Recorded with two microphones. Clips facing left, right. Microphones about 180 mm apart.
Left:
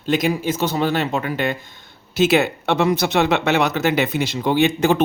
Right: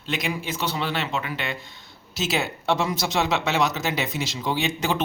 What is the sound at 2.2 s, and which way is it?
Speech, 60° left (ahead or behind).